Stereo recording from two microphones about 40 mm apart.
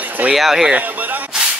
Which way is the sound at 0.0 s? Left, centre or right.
Right.